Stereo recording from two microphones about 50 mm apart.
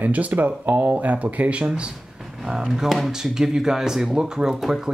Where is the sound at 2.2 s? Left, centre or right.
Centre.